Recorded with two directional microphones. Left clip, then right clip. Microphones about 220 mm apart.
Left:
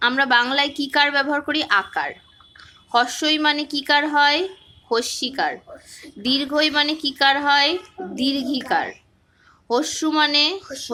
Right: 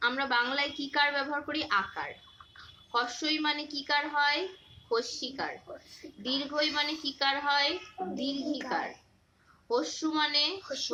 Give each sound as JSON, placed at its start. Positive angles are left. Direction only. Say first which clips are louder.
{"t": 0.0, "sound": "a woman's voice", "louder": "left 11 dB", "side_deg": 50}